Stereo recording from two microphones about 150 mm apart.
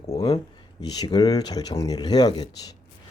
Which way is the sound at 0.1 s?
25° left (ahead or behind).